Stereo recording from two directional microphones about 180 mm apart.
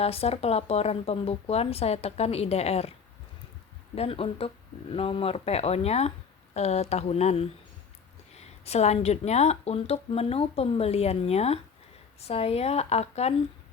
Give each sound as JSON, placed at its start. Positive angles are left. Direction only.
{"t": 0.0, "sound": "speech", "side_deg": 35}
{"t": 3.9, "sound": "speech", "side_deg": 30}